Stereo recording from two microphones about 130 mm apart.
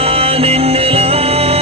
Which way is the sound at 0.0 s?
50° right (ahead or behind).